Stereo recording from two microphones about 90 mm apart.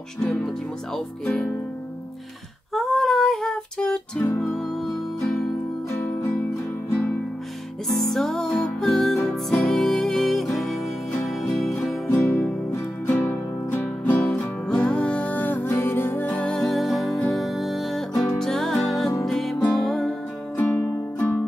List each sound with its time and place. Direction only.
0.2 s speech: 5° left (ahead or behind)
2.7 s female singing: centre (ahead or behind)
7.9 s music: 5° left (ahead or behind)
12.1 s music: 30° left (ahead or behind); by 20.2 s 5° left (ahead or behind)
20.5 s music: 20° left (ahead or behind)